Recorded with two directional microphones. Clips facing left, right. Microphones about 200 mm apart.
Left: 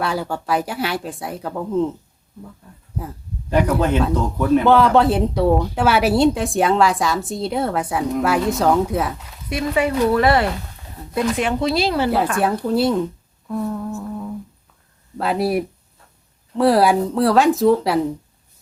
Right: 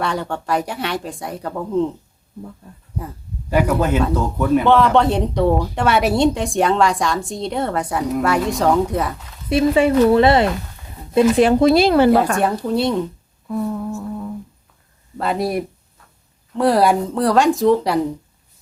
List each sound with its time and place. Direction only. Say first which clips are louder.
0.0 s speech: even; 5° left (ahead or behind)
3.5 s speech: even; 5° right (ahead or behind)
9.5 s speech: right 5 dB; 30° right (ahead or behind)
11.6 s speech: right 5 dB; 55° right (ahead or behind)
12.4 s speech: even; centre (ahead or behind)